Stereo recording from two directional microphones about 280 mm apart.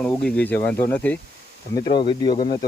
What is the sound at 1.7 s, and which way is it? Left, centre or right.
Speech, centre.